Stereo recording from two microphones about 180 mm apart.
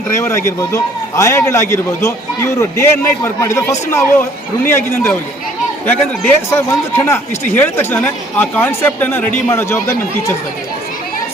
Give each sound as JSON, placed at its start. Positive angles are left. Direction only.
{"t": 0.1, "sound": "a man's voice", "side_deg": 15}